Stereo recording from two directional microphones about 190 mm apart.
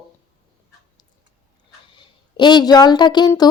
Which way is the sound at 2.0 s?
25° left (ahead or behind).